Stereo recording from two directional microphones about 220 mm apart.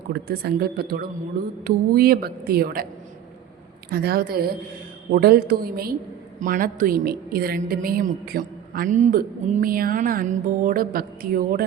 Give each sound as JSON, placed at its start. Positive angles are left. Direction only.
{"t": 0.1, "sound": "a woman's voice", "side_deg": -45}
{"t": 3.9, "sound": "a woman's voice", "side_deg": -45}